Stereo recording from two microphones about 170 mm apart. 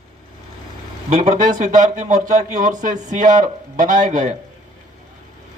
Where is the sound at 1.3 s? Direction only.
50° right (ahead or behind).